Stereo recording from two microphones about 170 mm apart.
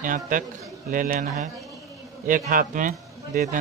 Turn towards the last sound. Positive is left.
turn(degrees=-50)  # may be behind; listen again after turning